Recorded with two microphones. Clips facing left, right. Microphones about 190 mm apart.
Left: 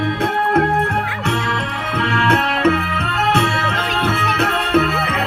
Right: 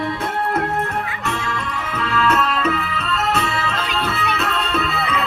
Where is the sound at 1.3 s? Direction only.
70° left (ahead or behind).